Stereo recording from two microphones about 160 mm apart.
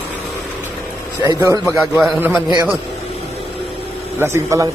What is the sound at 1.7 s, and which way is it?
Speech, centre (ahead or behind).